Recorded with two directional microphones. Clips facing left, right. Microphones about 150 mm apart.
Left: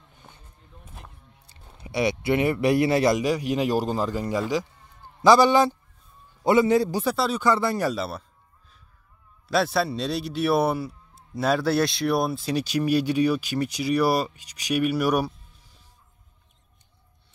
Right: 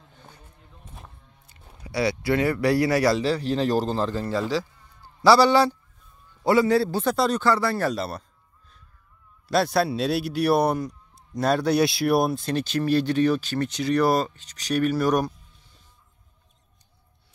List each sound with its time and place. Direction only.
1.8 s a man's voice: 20° left (ahead or behind); by 7.4 s 5° left (ahead or behind)
7.4 s a man's voice: 20° left (ahead or behind)
7.9 s speech: centre (ahead or behind)
9.5 s a man's voice: centre (ahead or behind)